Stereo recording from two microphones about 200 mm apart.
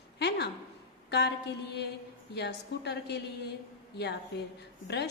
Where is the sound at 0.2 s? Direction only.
55° left (ahead or behind).